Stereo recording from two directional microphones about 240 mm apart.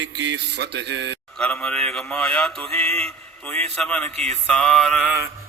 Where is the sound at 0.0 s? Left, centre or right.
Right.